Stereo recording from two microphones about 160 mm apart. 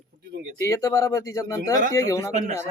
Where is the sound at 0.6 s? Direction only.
20° left (ahead or behind).